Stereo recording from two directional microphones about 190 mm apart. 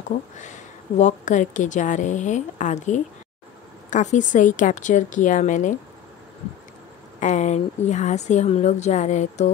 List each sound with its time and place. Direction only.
0.4 s a woman's voice: 40° left (ahead or behind)
7.2 s a woman's voice: 40° left (ahead or behind)